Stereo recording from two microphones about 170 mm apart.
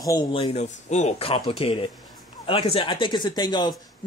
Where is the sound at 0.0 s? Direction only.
25° left (ahead or behind).